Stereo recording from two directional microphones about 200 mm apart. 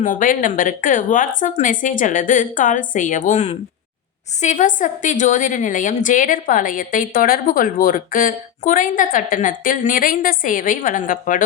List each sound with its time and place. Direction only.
0.0 s a woman's voice: 40° left (ahead or behind)